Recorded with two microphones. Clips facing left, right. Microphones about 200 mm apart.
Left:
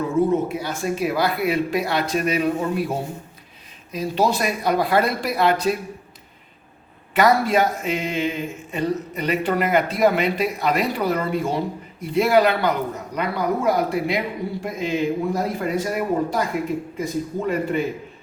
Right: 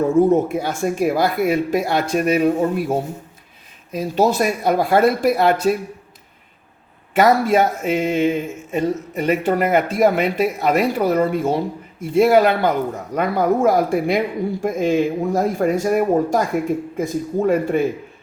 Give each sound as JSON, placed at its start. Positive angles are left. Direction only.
{"t": 0.0, "sound": "speech", "side_deg": -50}
{"t": 3.9, "sound": "speech", "side_deg": -45}
{"t": 7.1, "sound": "speech", "side_deg": -50}